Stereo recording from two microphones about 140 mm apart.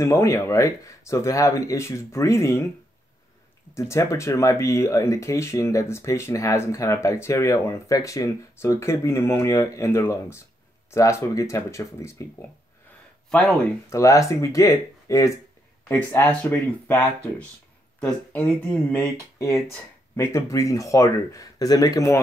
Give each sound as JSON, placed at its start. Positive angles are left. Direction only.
{"t": 0.0, "sound": "speech", "side_deg": 20}
{"t": 3.7, "sound": "speech", "side_deg": 20}
{"t": 13.8, "sound": "speech", "side_deg": 20}
{"t": 15.9, "sound": "speech", "side_deg": 10}